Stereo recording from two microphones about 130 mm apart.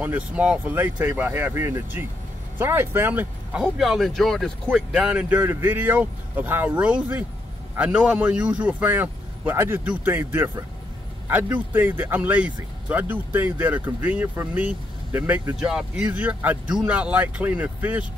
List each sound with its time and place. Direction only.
0.0 s speech: 10° right (ahead or behind)
3.7 s speech: centre (ahead or behind)